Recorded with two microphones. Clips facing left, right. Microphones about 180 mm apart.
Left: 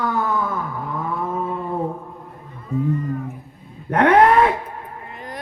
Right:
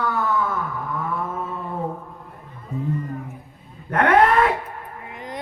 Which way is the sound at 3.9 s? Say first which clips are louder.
Left 3 dB; 30° left (ahead or behind).